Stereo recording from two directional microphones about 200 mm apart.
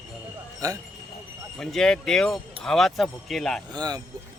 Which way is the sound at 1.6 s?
5° left (ahead or behind).